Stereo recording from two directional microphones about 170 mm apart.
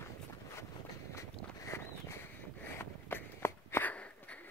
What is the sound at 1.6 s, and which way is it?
Walk, 15° left (ahead or behind).